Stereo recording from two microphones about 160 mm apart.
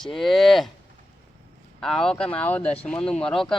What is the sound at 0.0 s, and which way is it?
Speech, centre (ahead or behind).